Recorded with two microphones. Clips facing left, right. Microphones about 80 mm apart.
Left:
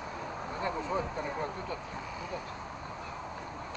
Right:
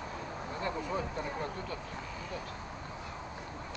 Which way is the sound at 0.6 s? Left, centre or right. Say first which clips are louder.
Left 2 dB; centre.